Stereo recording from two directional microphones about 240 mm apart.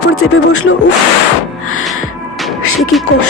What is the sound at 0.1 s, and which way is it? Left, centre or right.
Speech, left.